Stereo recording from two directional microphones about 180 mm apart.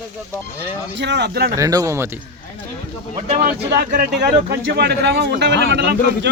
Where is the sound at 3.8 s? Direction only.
55° right (ahead or behind).